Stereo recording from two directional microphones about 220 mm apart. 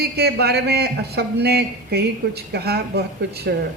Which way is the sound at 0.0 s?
45° right (ahead or behind).